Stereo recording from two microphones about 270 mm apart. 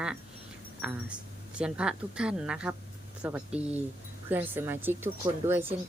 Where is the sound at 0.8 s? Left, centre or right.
Centre.